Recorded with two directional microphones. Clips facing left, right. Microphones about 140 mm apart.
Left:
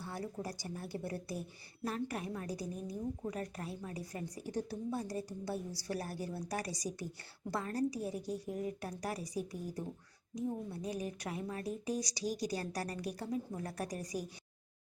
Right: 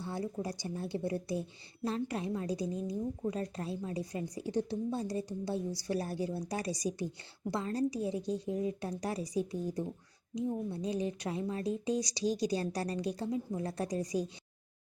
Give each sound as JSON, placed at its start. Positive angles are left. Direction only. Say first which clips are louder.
{"t": 0.0, "sound": "speech", "louder": "right 4 dB", "side_deg": -20}